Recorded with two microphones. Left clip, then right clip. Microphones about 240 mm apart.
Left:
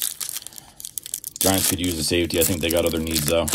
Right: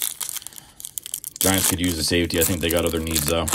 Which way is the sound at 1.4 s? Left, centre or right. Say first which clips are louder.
Even; centre.